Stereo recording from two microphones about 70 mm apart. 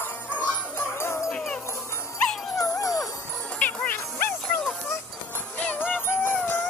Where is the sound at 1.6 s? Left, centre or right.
Left.